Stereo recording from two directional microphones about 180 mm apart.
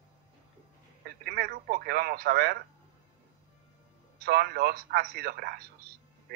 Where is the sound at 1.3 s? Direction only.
60° right (ahead or behind).